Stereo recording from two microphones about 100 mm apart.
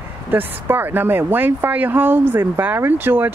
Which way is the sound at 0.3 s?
20° right (ahead or behind).